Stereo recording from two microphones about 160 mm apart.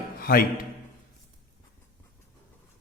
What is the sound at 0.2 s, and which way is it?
Speech, 65° left (ahead or behind).